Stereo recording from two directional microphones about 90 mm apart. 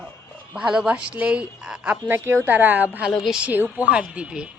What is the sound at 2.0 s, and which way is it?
Speech, 25° right (ahead or behind).